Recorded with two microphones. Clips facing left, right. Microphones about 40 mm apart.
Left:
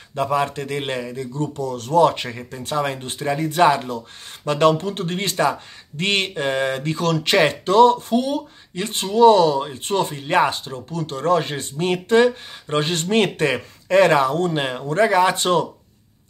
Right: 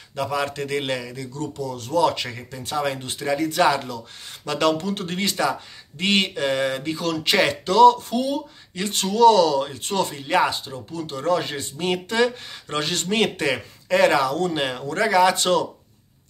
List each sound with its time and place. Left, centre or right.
0.1 s speech: left
1.6 s speech: left
7.3 s speech: left